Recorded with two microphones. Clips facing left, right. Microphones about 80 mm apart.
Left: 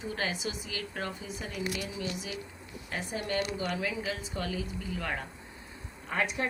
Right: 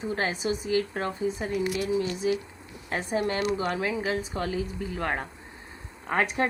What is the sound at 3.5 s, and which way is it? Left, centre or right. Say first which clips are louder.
A woman's voice: right 5 dB; right.